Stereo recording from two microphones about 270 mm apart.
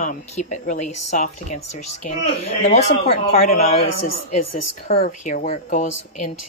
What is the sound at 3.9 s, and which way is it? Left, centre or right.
Speech, left.